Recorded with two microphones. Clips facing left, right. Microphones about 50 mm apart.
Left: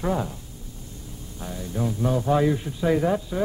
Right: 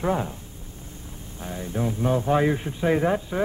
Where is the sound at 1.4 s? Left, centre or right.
Right.